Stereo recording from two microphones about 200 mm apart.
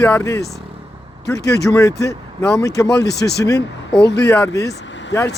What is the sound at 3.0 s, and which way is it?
Speech, 55° left (ahead or behind).